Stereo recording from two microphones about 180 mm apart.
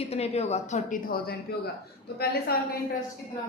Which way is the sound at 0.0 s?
35° left (ahead or behind).